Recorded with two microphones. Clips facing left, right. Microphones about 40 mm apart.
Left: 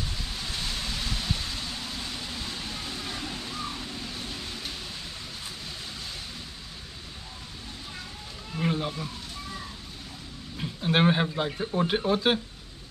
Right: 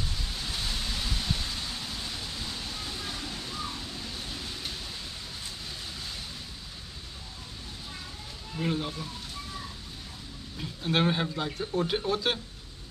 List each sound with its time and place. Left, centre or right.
0.4 s rain: centre
2.5 s a sound: centre
8.5 s speech: centre
10.6 s speech: centre